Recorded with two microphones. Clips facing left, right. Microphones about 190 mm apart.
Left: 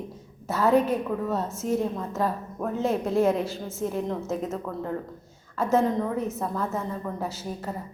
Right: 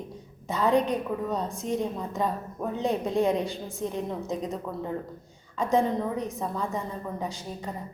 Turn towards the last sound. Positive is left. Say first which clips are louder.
# left 2 dB
turn(degrees=5)  # may be behind; listen again after turning